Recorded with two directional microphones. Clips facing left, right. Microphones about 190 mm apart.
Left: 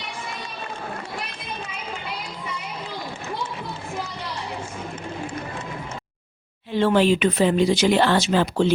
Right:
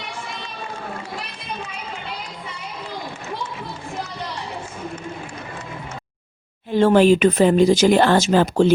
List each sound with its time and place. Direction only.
6.7 s speech: 45° right (ahead or behind)